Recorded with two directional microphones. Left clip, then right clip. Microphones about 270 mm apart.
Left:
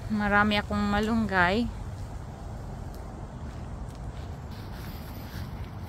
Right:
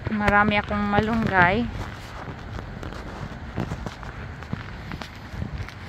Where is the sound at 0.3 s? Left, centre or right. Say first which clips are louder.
Right 5 dB; centre.